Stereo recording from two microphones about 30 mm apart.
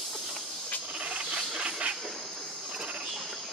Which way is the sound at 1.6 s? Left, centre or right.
Right.